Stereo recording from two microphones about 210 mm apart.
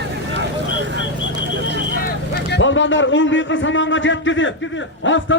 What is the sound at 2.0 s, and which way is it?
A man's voice, 50° left (ahead or behind).